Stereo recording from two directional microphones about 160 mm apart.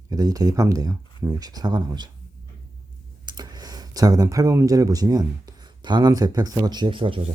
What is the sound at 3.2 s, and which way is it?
Speech, 25° right (ahead or behind).